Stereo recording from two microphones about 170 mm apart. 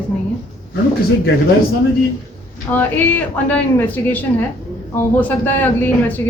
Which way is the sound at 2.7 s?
10° left (ahead or behind).